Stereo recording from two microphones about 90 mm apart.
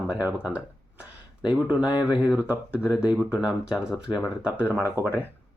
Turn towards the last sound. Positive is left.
turn(degrees=-20)  # may be behind; listen again after turning